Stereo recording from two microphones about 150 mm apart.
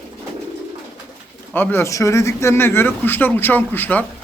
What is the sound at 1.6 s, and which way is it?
Speech, 15° left (ahead or behind).